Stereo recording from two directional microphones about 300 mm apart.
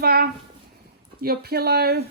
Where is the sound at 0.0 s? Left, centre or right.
Right.